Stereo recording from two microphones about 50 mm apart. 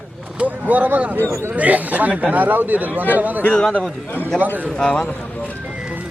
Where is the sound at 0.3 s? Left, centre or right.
Right.